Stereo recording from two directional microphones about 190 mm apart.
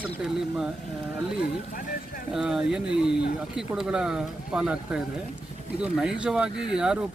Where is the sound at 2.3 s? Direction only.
5° right (ahead or behind).